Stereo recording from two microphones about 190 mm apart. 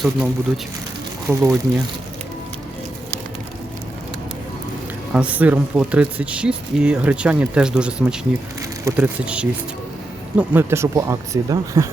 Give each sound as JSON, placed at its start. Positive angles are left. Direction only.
{"t": 0.0, "sound": "speech", "side_deg": 0}
{"t": 1.3, "sound": "speech", "side_deg": -10}
{"t": 5.1, "sound": "speech", "side_deg": -5}